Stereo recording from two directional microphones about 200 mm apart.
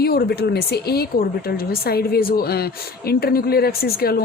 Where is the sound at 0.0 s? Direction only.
50° left (ahead or behind).